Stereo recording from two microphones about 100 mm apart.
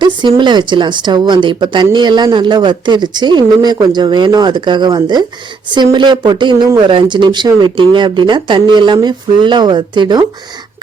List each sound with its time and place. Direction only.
0.0 s a woman's voice: 50° right (ahead or behind)